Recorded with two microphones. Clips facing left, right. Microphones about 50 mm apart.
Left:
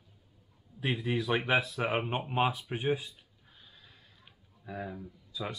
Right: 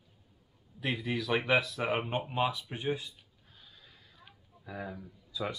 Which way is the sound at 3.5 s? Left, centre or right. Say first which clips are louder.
Even; left.